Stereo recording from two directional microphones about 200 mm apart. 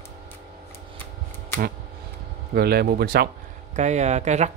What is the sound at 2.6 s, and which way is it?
Speech, 50° right (ahead or behind).